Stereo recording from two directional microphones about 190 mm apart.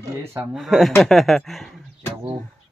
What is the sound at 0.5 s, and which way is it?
Speech, centre (ahead or behind).